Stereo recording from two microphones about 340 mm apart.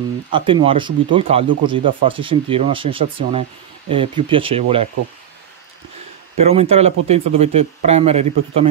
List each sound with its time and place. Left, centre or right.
0.3 s speech: centre
6.4 s speech: centre